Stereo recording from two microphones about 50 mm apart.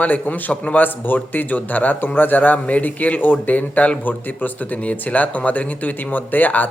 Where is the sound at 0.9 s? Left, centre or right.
Left.